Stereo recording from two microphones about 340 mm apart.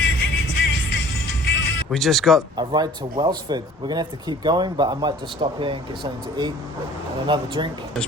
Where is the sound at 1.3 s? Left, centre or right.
Left.